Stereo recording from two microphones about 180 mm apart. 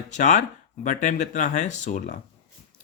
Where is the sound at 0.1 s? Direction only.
45° left (ahead or behind).